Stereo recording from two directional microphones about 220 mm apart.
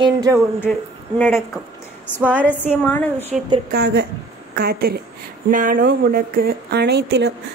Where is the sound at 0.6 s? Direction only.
5° left (ahead or behind).